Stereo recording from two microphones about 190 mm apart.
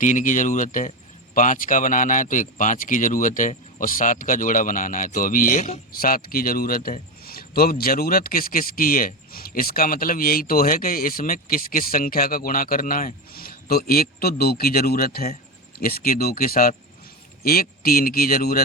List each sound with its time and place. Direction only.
0.0 s speech: 40° left (ahead or behind)